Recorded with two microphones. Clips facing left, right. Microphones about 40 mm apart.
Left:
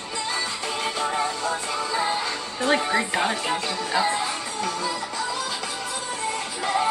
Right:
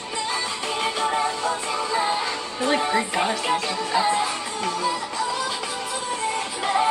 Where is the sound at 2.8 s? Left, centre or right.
Centre.